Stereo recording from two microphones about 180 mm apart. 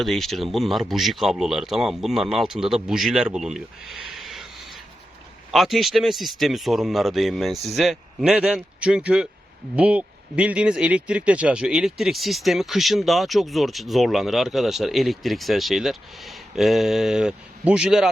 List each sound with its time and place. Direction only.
0.0 s speech: centre (ahead or behind)
5.5 s speech: centre (ahead or behind)